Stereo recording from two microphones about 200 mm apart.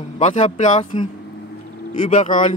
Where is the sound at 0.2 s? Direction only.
35° left (ahead or behind).